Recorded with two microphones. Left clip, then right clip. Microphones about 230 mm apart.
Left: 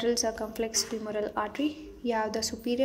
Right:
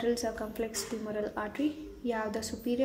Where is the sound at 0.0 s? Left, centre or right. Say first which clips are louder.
Left 3 dB; left.